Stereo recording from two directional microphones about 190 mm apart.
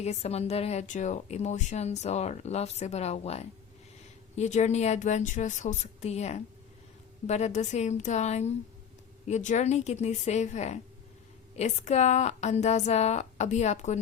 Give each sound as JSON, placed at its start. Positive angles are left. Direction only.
{"t": 0.0, "sound": "speech", "side_deg": 35}